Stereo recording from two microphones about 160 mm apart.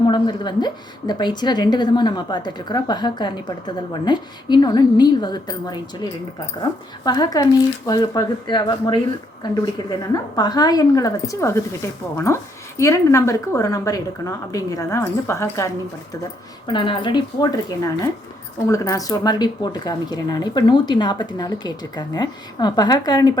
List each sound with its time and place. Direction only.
0.1 s speech: 25° left (ahead or behind)
16.6 s speech: 30° left (ahead or behind)